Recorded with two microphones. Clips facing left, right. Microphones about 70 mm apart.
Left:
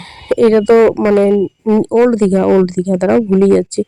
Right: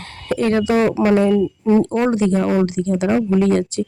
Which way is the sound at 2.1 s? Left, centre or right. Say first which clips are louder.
Left 7 dB; left.